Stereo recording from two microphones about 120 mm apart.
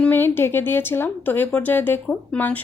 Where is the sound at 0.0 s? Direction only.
15° left (ahead or behind).